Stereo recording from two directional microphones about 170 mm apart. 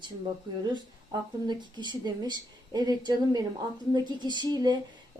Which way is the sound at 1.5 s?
25° right (ahead or behind).